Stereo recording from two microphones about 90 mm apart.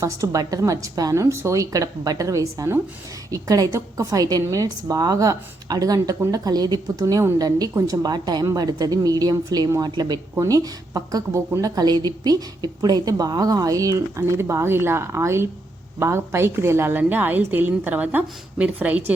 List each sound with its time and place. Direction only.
0.0 s a woman's voice: 40° right (ahead or behind); by 19.1 s 15° right (ahead or behind)